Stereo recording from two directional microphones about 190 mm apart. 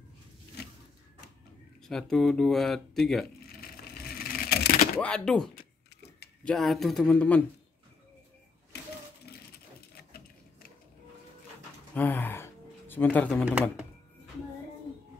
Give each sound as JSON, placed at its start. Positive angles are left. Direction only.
{"t": 1.9, "sound": "speech", "side_deg": 5}
{"t": 3.6, "sound": "a sound", "side_deg": 50}
{"t": 5.0, "sound": "speech", "side_deg": 5}
{"t": 8.7, "sound": "typewriter", "side_deg": 60}
{"t": 11.9, "sound": "a sound", "side_deg": 10}
{"t": 13.5, "sound": "speech", "side_deg": -5}